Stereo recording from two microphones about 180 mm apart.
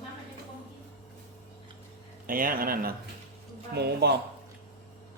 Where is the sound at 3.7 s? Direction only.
65° right (ahead or behind).